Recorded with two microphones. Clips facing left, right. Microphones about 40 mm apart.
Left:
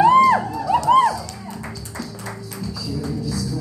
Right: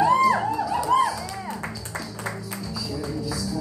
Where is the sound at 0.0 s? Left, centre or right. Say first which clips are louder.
Left 5 dB; left.